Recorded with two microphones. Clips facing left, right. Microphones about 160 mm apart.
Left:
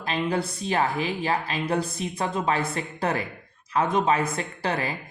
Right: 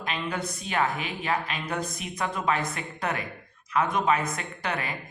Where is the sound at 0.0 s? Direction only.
30° left (ahead or behind).